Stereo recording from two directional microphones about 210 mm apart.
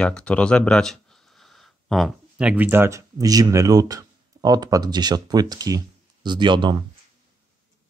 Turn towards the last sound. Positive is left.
turn(degrees=-20)  # may be behind; listen again after turning